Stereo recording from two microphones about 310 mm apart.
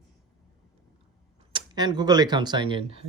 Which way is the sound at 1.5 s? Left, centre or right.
Centre.